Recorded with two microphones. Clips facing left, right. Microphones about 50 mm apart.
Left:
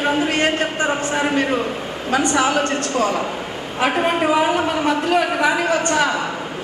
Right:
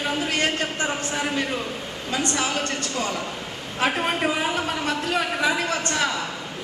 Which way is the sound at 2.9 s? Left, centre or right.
Left.